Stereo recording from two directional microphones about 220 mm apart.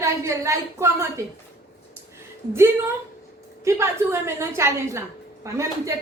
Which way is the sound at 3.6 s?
10° right (ahead or behind).